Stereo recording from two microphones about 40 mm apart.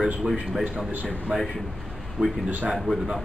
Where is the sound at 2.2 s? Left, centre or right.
Right.